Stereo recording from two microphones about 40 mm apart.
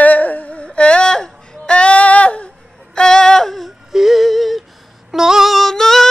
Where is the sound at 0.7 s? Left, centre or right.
Left.